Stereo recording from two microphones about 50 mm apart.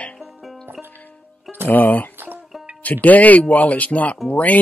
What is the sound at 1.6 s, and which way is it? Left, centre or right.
Speech, left.